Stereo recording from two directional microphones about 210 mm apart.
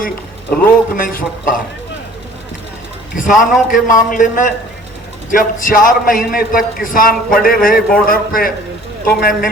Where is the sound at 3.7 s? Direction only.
40° left (ahead or behind).